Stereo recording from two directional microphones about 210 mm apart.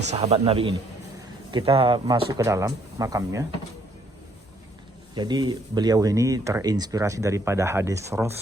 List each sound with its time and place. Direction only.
0.0 s speech: 30° right (ahead or behind); by 3.4 s 15° right (ahead or behind)
5.1 s speech: 20° right (ahead or behind)